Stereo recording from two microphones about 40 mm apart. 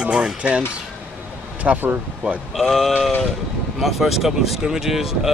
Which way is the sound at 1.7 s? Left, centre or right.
Right.